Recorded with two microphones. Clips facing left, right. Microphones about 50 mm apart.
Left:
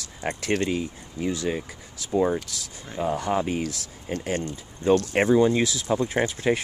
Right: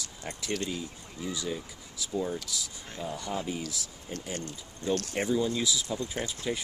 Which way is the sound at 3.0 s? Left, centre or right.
Left.